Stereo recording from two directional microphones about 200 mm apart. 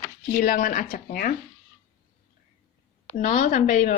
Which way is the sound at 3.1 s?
40° left (ahead or behind).